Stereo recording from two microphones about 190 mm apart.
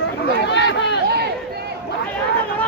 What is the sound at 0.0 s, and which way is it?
Run, 75° left (ahead or behind).